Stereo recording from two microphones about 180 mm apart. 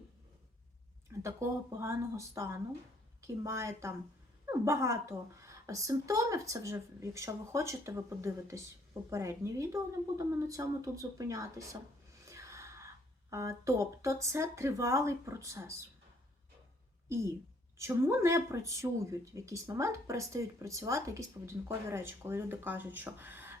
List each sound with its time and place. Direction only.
1.2 s speech: 15° right (ahead or behind)
12.2 s gasp: 15° right (ahead or behind)
13.3 s speech: 15° right (ahead or behind)
17.7 s speech: 15° right (ahead or behind)